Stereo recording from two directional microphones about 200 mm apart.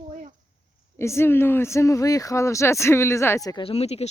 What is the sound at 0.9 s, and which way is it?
Speech, 15° left (ahead or behind).